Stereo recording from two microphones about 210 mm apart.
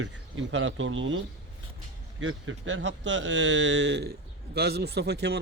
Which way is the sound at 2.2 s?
70° right (ahead or behind).